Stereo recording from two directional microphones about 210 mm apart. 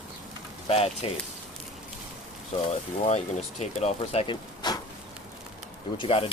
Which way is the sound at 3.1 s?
30° left (ahead or behind).